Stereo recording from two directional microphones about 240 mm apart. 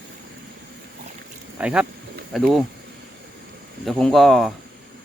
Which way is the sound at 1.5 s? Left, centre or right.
Centre.